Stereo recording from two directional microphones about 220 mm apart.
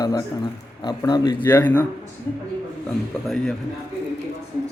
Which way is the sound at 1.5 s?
10° left (ahead or behind).